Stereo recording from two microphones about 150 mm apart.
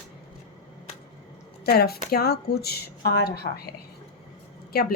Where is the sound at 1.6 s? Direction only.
90° left.